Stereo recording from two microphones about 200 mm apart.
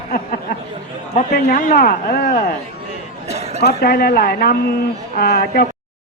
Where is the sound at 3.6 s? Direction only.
55° left (ahead or behind).